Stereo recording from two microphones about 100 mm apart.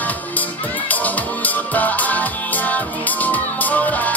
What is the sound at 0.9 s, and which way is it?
Music, 15° left (ahead or behind).